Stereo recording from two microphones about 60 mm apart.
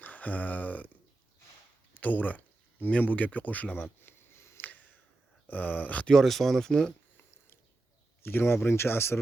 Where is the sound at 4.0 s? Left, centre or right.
Left.